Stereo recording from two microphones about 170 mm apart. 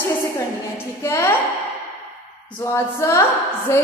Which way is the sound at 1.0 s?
15° left (ahead or behind).